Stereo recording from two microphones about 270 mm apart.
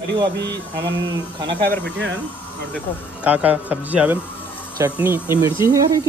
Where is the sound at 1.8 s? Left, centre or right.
Right.